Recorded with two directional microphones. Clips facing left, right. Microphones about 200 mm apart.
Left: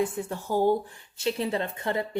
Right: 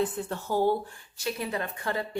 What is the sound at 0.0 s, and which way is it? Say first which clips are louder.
Speech: left 1 dB; 10° left (ahead or behind).